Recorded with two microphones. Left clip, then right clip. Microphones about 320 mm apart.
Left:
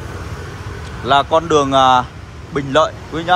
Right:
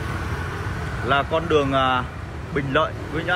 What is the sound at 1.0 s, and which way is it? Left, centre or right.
Speech, centre.